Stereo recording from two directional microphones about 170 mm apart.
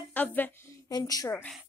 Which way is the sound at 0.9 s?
20° left (ahead or behind).